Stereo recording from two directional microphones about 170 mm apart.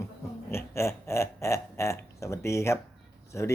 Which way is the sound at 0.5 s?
15° left (ahead or behind).